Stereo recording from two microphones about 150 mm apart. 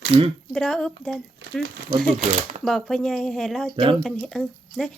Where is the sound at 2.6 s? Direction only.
5° left (ahead or behind).